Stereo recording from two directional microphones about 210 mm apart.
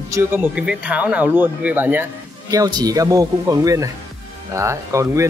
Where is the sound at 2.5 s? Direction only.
20° right (ahead or behind).